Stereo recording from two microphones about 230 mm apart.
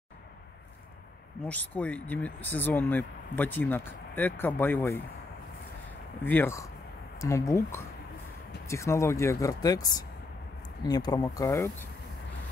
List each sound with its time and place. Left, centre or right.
1.4 s speech: centre
6.2 s speech: centre